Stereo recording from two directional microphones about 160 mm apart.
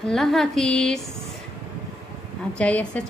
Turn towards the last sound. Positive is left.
turn(degrees=5)  # may be behind; listen again after turning